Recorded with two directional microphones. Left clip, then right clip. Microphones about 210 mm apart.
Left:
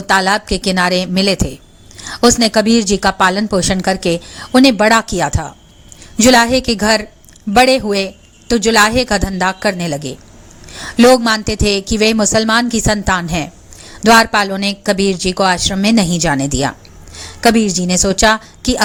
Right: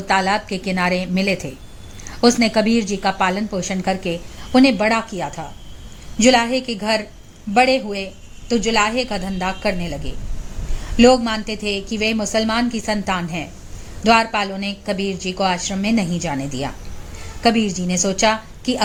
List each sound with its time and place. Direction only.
0.1 s a woman's voice: 20° left (ahead or behind)